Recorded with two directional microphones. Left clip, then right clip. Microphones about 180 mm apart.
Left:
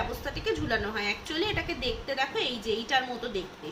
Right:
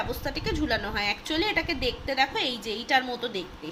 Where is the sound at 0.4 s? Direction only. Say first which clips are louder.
Even; 40° right (ahead or behind).